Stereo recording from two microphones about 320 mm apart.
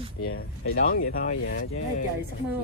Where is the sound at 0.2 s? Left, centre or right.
Left.